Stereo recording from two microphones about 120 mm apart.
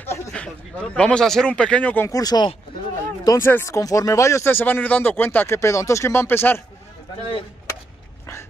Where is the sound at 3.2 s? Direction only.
20° left (ahead or behind).